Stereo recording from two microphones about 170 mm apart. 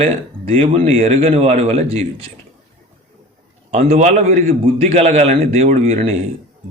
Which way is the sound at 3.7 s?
40° right (ahead or behind).